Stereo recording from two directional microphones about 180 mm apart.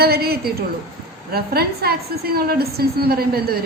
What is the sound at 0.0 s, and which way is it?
A woman's voice, 60° right (ahead or behind).